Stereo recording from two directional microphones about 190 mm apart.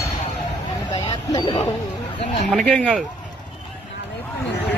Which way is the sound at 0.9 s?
25° left (ahead or behind).